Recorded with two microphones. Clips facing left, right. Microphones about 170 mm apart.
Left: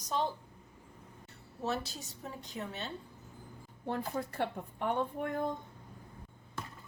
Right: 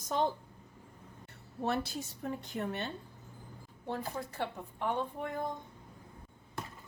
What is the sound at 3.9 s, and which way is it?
A woman's voice, 55° left (ahead or behind).